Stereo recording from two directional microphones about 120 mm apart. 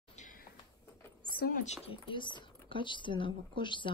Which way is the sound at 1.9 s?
45° left (ahead or behind).